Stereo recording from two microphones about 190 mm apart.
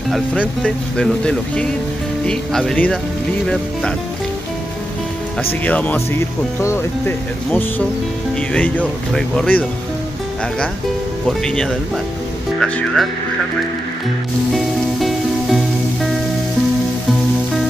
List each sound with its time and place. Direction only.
0.1 s speech: centre (ahead or behind)
5.5 s speech: 10° left (ahead or behind)
11.2 s speech: 5° left (ahead or behind)
14.5 s music: centre (ahead or behind)